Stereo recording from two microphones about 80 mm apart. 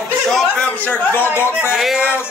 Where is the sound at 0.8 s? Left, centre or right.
Left.